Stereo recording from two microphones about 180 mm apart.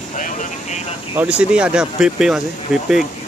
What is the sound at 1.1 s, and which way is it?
Speech, 5° right (ahead or behind).